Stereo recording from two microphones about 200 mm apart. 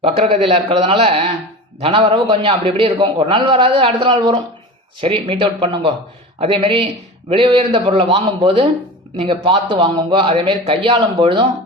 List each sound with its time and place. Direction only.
0.0 s a man's voice: 30° right (ahead or behind)